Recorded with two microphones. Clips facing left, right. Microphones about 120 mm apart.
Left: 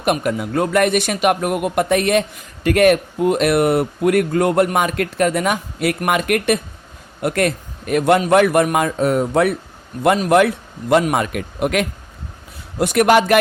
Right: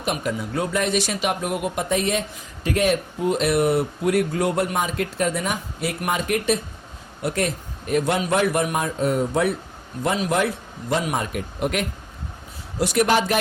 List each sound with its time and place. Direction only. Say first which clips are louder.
0.0 s a man's voice: left 6 dB; 60° left (ahead or behind); by 11.9 s 90° left
12.8 s speech: left 6 dB; 60° left (ahead or behind)